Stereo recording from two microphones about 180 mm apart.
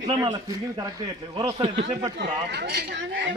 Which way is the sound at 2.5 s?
65° right (ahead or behind).